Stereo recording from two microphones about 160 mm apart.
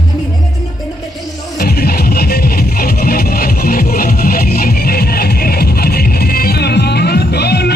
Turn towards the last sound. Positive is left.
turn(degrees=90)